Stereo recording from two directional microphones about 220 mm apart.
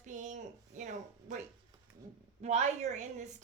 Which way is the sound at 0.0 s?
35° right (ahead or behind).